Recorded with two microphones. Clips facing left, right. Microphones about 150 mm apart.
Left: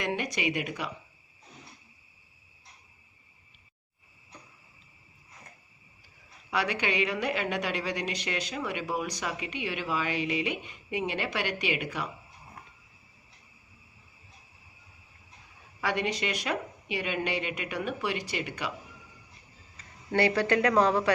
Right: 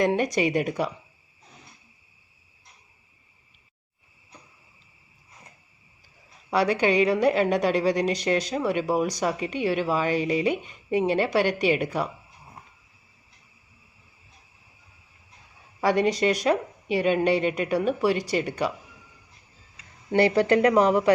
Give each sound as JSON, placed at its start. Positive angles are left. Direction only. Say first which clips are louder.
{"t": 0.0, "sound": "a woman's voice", "louder": "right 8 dB", "side_deg": -40}
{"t": 6.5, "sound": "a woman's voice", "louder": "right 8 dB", "side_deg": -35}
{"t": 15.8, "sound": "a woman's voice", "louder": "right 9 dB", "side_deg": -40}
{"t": 20.1, "sound": "speech", "louder": "right 5 dB", "side_deg": -25}